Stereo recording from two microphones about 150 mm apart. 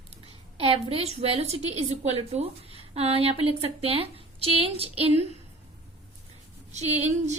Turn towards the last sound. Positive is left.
turn(degrees=-50)  # may be behind; listen again after turning